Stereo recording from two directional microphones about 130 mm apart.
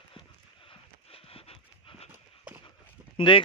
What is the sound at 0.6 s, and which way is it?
Horse, 45° left (ahead or behind).